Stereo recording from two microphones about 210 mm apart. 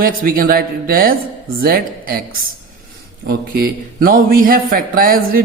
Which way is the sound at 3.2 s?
45° right (ahead or behind).